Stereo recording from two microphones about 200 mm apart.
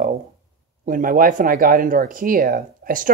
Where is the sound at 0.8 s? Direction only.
45° right (ahead or behind).